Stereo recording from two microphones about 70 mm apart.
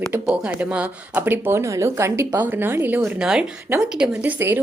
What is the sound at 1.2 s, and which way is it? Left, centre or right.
Speech, right.